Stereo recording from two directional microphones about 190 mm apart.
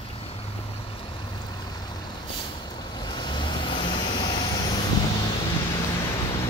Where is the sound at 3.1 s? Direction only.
25° left (ahead or behind).